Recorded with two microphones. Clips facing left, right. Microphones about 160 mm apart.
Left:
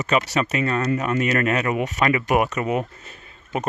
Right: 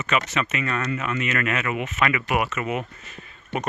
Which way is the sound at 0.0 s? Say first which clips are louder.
Left 4 dB; 35° left (ahead or behind).